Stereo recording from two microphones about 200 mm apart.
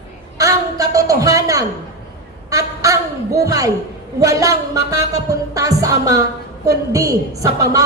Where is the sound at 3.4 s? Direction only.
15° right (ahead or behind).